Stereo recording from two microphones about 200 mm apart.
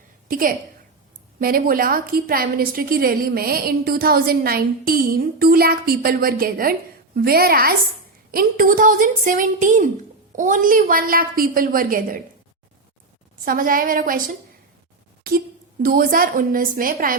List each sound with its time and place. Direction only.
0.3 s a woman's voice: 45° right (ahead or behind)
13.4 s a woman's voice: 45° right (ahead or behind)
15.3 s a woman's voice: 50° right (ahead or behind)